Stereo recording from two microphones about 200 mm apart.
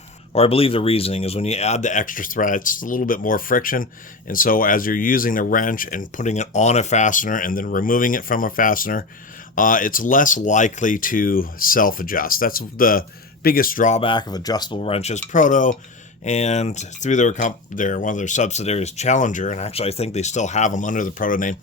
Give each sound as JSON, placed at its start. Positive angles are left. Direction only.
{"t": 0.3, "sound": "speech", "side_deg": 30}
{"t": 14.0, "sound": "speech", "side_deg": 25}